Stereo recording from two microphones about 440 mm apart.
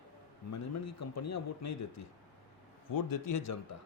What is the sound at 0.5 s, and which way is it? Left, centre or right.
A man's voice, left.